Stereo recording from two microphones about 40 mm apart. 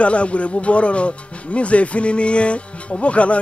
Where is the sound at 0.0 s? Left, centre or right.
Left.